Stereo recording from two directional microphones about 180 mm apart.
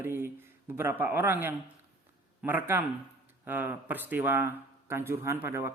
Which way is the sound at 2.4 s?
10° right (ahead or behind).